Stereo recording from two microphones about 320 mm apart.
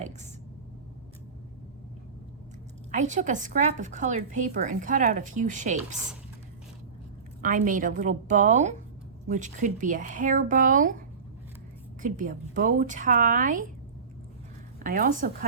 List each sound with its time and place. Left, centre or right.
2.9 s speech: right
7.4 s speech: right
12.0 s speech: right
14.8 s speech: right